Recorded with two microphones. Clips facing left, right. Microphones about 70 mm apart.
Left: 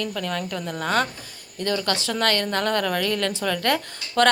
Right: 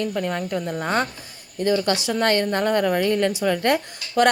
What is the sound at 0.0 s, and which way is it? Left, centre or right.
A woman's voice, right.